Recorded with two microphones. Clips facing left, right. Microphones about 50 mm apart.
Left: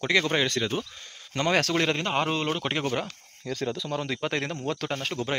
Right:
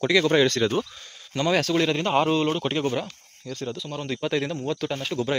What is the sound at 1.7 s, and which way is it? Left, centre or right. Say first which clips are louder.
Speech: right 3 dB; left.